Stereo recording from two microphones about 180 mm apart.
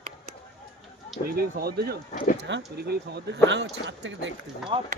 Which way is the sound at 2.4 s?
75° right (ahead or behind).